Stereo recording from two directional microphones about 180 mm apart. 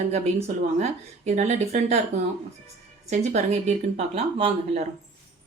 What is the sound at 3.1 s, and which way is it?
A woman's voice, 35° right (ahead or behind).